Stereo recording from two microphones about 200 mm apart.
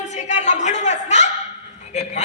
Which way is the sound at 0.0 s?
35° left (ahead or behind).